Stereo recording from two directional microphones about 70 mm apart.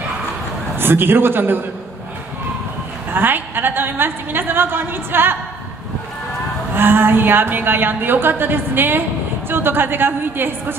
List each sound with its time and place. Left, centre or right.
0.7 s a woman's voice: right
3.1 s a woman's voice: right
6.7 s a woman's voice: right